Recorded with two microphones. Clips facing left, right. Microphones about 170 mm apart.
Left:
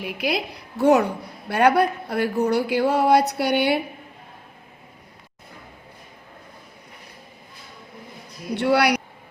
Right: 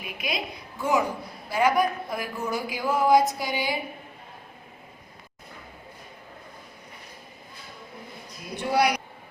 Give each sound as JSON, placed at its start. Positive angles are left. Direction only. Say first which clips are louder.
{"t": 0.0, "sound": "a woman's voice", "louder": "left 7 dB", "side_deg": 70}
{"t": 8.5, "sound": "a woman's voice", "louder": "left 4 dB", "side_deg": 70}